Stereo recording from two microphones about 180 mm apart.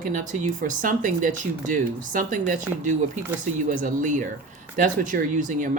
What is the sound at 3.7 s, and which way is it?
Speech, 45° right (ahead or behind).